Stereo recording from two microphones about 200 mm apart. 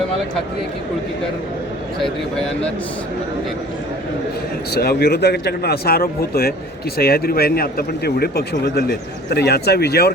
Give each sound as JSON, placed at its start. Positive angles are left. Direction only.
{"t": 2.3, "sound": "a man's voice", "side_deg": 5}
{"t": 4.7, "sound": "speech", "side_deg": 50}